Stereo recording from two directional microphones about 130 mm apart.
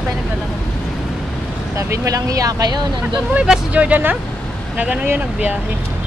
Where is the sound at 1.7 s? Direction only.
25° right (ahead or behind).